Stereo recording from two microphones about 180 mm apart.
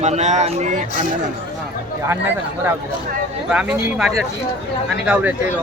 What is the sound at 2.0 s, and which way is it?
Speech, 10° right (ahead or behind).